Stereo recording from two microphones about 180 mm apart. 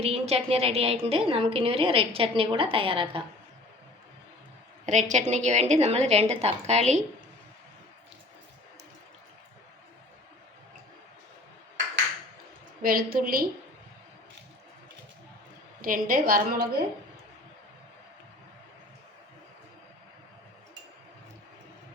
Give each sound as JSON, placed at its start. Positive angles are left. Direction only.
{"t": 0.0, "sound": "a woman's voice", "side_deg": -35}
{"t": 4.9, "sound": "a woman's voice", "side_deg": -40}
{"t": 12.8, "sound": "a woman's voice", "side_deg": -55}
{"t": 15.8, "sound": "a woman's voice", "side_deg": -50}